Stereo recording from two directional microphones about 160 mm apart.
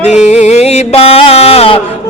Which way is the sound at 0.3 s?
45° left (ahead or behind).